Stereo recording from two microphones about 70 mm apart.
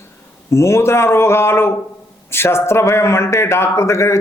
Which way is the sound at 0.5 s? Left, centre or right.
Left.